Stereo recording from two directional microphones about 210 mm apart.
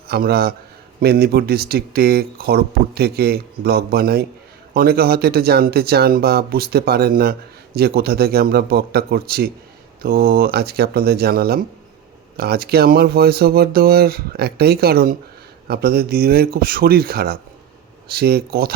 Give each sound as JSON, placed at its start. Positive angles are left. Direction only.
{"t": 0.1, "sound": "speech", "side_deg": -45}